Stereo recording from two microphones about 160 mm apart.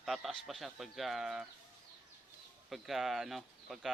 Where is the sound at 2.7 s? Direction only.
Centre (ahead or behind).